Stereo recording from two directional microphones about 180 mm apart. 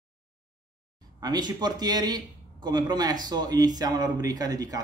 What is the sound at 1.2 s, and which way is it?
Speech, 25° right (ahead or behind).